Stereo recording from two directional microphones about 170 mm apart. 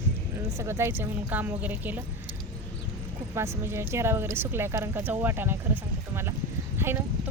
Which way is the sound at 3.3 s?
15° right (ahead or behind).